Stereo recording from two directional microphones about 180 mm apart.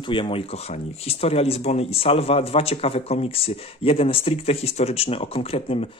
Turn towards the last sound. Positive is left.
turn(degrees=30)  # may be behind; listen again after turning